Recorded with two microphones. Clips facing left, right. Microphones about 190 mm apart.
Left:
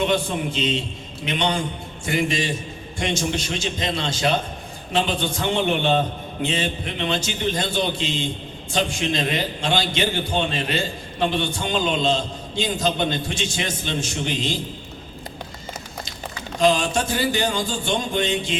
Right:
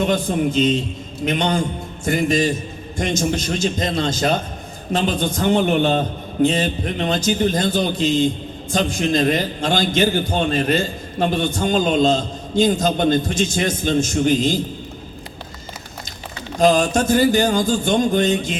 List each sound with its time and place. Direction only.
0.0 s a man's voice: 45° right (ahead or behind)
16.6 s a man's voice: 45° right (ahead or behind)